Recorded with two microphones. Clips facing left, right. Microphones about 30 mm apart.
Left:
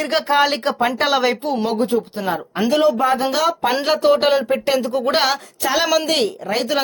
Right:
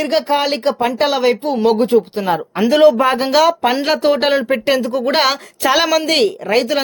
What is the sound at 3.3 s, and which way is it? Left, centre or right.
Speech, right.